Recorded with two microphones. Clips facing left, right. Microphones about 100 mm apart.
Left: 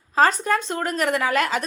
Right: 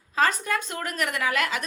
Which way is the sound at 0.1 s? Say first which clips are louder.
Left 5 dB; 35° left (ahead or behind).